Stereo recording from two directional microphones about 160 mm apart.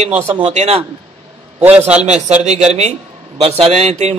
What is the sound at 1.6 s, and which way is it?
Speech, 10° right (ahead or behind).